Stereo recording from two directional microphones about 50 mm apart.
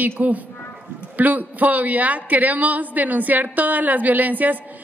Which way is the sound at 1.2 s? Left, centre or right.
Right.